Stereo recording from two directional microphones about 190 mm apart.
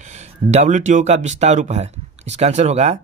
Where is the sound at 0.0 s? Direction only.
35° right (ahead or behind).